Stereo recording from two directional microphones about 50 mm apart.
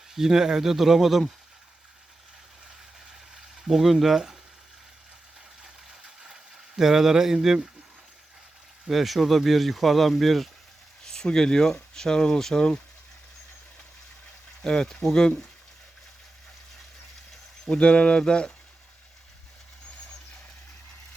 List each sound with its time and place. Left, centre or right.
0.1 s speech: centre
3.7 s speech: centre
6.7 s speech: centre
8.9 s speech: centre
11.0 s speech: centre
14.6 s speech: centre
17.7 s a sound: left